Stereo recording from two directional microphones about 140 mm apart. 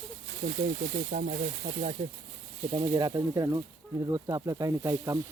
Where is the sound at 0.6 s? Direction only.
60° right (ahead or behind).